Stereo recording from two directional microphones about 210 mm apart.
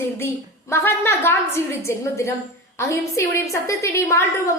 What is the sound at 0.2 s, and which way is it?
A woman's voice, 10° left (ahead or behind).